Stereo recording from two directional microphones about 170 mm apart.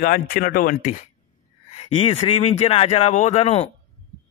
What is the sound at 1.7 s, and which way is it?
Speech, 35° left (ahead or behind).